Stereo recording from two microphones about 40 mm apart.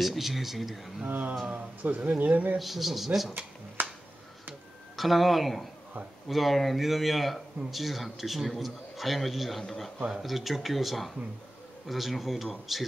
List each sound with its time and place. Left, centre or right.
0.0 s speech: centre
1.0 s a sound: right
1.5 s speech: right
2.6 s speech: centre
3.8 s a sound: right
4.9 s speech: centre